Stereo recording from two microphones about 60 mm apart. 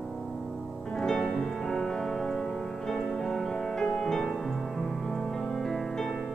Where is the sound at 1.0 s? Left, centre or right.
Centre.